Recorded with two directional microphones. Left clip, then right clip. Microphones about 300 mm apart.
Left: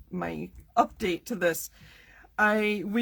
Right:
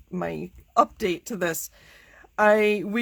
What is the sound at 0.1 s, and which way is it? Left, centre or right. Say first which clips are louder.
Speech: right 4 dB; right.